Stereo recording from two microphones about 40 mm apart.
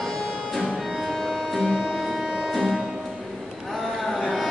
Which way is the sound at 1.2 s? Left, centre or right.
Centre.